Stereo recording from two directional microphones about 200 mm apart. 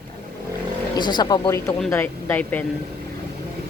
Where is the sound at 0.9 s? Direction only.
20° left (ahead or behind).